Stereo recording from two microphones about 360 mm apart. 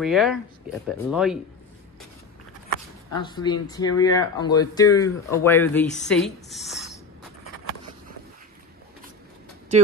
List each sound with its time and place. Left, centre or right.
0.0 s speech: centre
3.2 s speech: centre